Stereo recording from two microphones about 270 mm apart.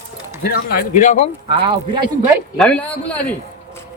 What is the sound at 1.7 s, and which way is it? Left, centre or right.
Speech, centre.